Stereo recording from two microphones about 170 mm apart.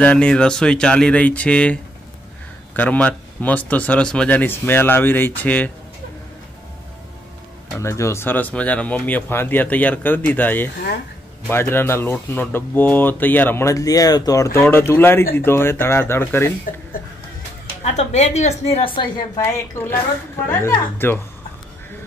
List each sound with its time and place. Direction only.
0.0 s speech: 5° left (ahead or behind)
7.7 s speech: 15° left (ahead or behind)
17.8 s a woman's voice: 40° left (ahead or behind)
19.3 s speech: 15° left (ahead or behind)